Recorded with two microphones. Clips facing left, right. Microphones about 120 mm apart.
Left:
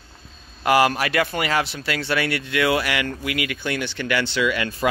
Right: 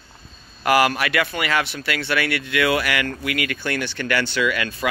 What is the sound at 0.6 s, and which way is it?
Speech, 25° left (ahead or behind).